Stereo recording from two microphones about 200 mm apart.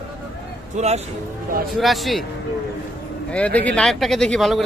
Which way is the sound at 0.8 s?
35° right (ahead or behind).